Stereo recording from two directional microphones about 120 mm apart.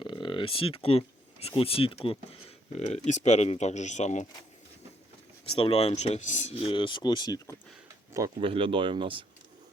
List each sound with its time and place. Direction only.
0.0 s speech: 45° left (ahead or behind)
2.7 s speech: 70° left (ahead or behind)
5.5 s speech: 55° left (ahead or behind); by 6.6 s 75° left (ahead or behind)
6.7 s speech: 40° left (ahead or behind)
8.4 s speech: 50° right (ahead or behind)